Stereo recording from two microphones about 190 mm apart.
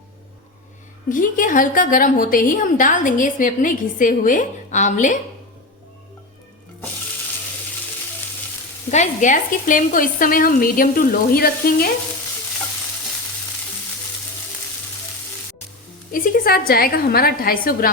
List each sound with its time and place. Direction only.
1.1 s a woman's voice: 45° left (ahead or behind)
8.9 s a woman's voice: 40° left (ahead or behind)
16.1 s a woman's voice: 45° left (ahead or behind)